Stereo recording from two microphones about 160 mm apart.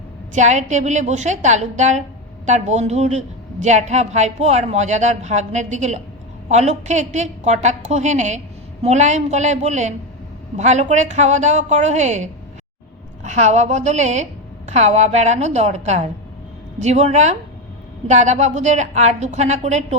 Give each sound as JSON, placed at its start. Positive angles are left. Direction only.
{"t": 0.3, "sound": "a woman's voice", "side_deg": -50}